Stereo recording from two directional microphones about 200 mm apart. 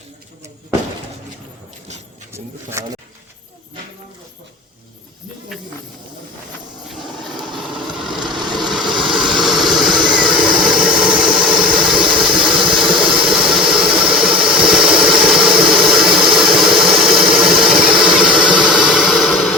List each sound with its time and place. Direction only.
2.3 s speech: 15° right (ahead or behind)
7.3 s a sound: centre (ahead or behind)
7.8 s vehicle: centre (ahead or behind)
10.2 s engine: 5° right (ahead or behind)
12.0 s engine: 25° right (ahead or behind)
12.7 s engine: 5° right (ahead or behind)